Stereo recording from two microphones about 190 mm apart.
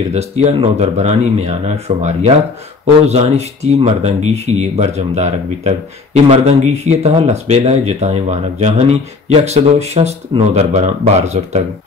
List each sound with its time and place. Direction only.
0.1 s speech: 35° right (ahead or behind)